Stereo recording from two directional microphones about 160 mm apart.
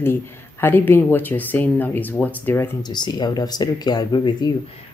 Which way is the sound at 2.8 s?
25° left (ahead or behind).